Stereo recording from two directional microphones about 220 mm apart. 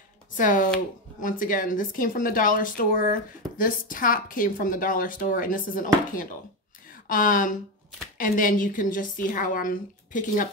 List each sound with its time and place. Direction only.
0.3 s speech: 35° left (ahead or behind)